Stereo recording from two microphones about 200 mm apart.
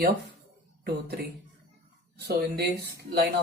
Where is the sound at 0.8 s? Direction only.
50° right (ahead or behind).